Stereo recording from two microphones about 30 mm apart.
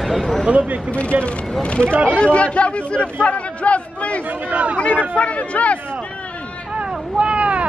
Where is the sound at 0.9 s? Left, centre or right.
Left.